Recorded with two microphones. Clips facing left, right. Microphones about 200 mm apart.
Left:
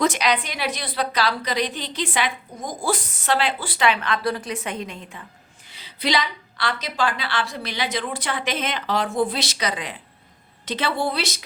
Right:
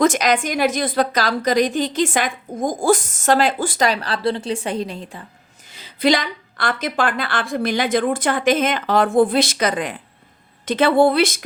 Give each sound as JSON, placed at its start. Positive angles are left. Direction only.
{"t": 0.0, "sound": "a woman's voice", "side_deg": -45}
{"t": 5.6, "sound": "a woman's voice", "side_deg": -45}